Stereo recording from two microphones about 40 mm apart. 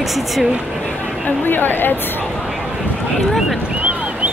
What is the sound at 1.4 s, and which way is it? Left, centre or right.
Speech, left.